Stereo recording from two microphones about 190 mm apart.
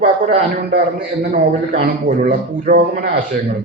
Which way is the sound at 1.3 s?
50° right (ahead or behind).